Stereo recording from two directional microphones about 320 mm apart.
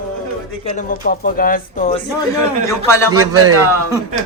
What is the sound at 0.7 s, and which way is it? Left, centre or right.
Speech, left.